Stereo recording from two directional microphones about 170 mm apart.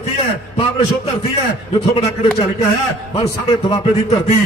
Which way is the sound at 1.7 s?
35° left (ahead or behind).